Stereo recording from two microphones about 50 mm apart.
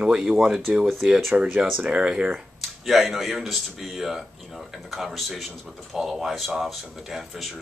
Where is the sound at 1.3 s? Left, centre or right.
Right.